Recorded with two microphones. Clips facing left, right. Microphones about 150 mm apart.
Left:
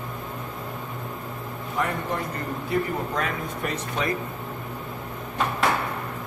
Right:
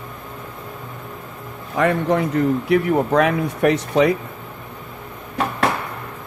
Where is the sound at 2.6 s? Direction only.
80° right.